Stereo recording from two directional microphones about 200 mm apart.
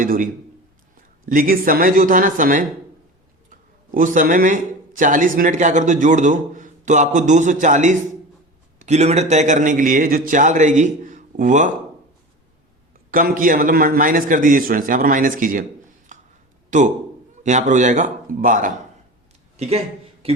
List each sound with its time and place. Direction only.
0.0 s a man's voice: 40° right (ahead or behind)
3.9 s speech: 40° right (ahead or behind)
13.1 s a man's voice: 45° right (ahead or behind)
16.1 s a sound: 40° right (ahead or behind)
16.6 s a man's voice: 40° right (ahead or behind)